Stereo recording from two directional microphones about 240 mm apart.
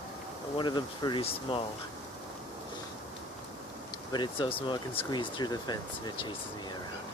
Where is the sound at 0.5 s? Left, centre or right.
Centre.